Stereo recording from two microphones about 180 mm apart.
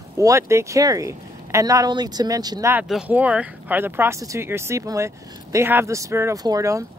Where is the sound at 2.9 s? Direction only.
5° right (ahead or behind).